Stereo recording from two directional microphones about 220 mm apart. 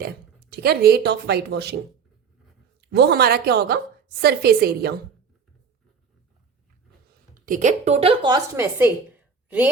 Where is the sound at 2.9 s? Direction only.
45° right (ahead or behind).